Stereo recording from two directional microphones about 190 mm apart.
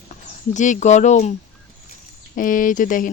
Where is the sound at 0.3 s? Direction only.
40° left (ahead or behind).